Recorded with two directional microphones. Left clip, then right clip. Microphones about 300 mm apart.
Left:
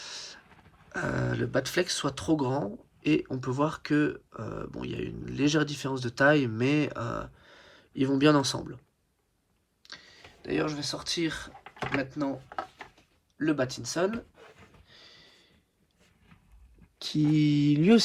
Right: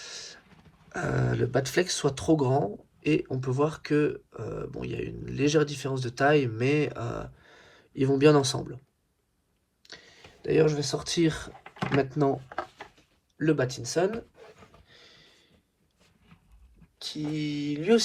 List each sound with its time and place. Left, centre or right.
0.0 s a sound: centre
0.9 s speech: centre
9.8 s speech: centre
13.4 s speech: centre
14.8 s sniff: centre
17.0 s speech: left